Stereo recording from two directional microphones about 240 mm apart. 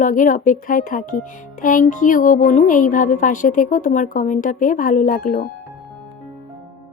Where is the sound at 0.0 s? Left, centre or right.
Left.